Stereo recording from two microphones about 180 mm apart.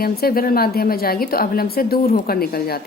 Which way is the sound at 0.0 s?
55° left (ahead or behind).